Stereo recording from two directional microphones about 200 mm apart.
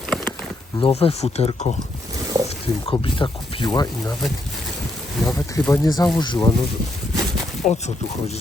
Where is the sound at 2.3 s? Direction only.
20° right (ahead or behind).